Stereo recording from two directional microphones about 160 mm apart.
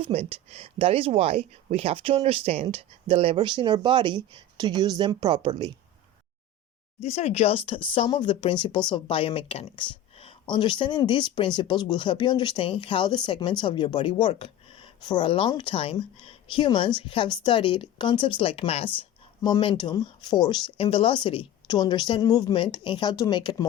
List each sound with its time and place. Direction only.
0.0 s speech: 35° right (ahead or behind)
7.0 s speech: 40° left (ahead or behind); by 23.6 s 25° left (ahead or behind)